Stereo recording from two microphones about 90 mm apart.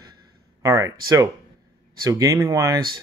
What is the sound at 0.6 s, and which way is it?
Speech, 35° right (ahead or behind).